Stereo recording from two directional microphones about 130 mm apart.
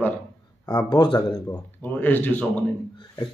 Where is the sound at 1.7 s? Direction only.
15° left (ahead or behind).